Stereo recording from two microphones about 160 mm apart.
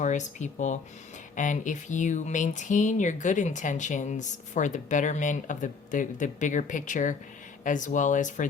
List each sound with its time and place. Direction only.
0.0 s speech: 50° left (ahead or behind)